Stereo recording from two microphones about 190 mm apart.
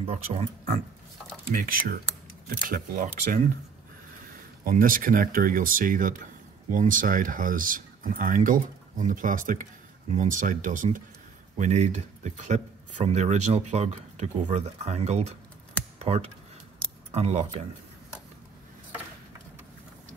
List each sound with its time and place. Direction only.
0.0 s speech: 30° right (ahead or behind)
1.5 s speech: 45° right (ahead or behind)
4.2 s speech: 50° right (ahead or behind)